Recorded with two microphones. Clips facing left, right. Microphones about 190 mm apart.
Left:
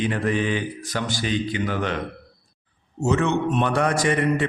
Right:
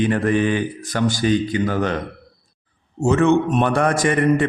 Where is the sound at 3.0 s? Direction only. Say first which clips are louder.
Right 5 dB; 50° right (ahead or behind).